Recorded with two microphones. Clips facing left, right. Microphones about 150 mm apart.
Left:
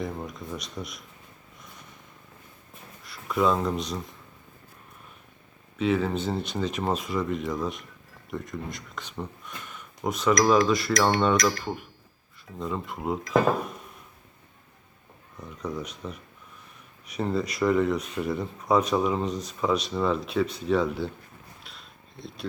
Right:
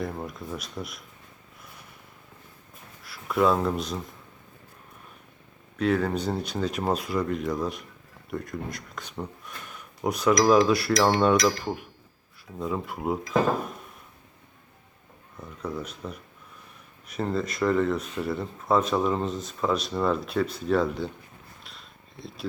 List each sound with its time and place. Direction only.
0.0 s speech: centre (ahead or behind)
3.0 s speech: 5° right (ahead or behind)
5.7 s speech: centre (ahead or behind)
15.4 s speech: 5° right (ahead or behind)
17.2 s speech: centre (ahead or behind)
21.6 s a sound: centre (ahead or behind)